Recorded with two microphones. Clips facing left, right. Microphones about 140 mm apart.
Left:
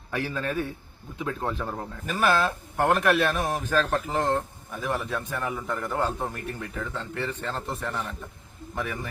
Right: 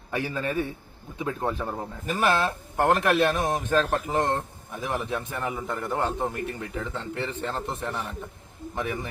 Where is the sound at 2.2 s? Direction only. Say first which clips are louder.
Left 1 dB; 25° right (ahead or behind).